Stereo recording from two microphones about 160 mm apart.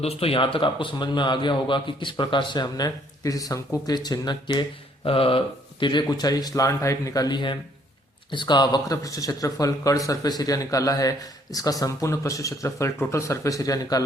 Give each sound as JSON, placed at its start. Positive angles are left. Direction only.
{"t": 0.0, "sound": "speech", "side_deg": 40}